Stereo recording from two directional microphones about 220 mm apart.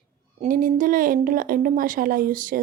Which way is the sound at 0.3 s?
40° right (ahead or behind).